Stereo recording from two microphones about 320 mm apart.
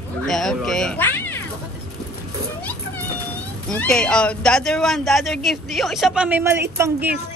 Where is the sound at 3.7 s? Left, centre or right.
Centre.